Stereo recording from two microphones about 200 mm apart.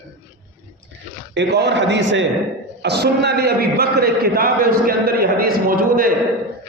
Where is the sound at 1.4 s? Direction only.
60° right (ahead or behind).